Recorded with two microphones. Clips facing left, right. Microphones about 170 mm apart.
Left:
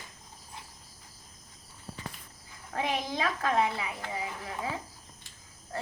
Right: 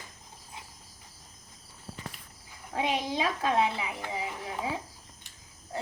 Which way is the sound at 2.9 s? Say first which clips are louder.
Right 1 dB; 20° right (ahead or behind).